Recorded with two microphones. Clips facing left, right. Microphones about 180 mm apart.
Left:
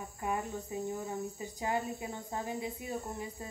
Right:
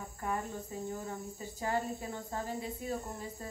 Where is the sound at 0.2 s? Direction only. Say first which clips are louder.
Left 1 dB; 15° left (ahead or behind).